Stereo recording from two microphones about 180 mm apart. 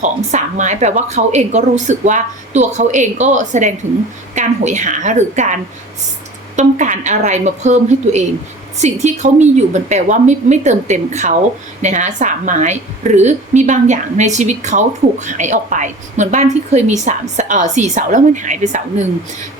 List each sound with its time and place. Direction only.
0.0 s speech: 40° right (ahead or behind)
6.6 s a woman's voice: 45° right (ahead or behind)